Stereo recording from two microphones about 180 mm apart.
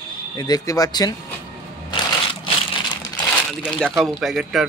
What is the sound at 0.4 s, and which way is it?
Speech, 20° left (ahead or behind).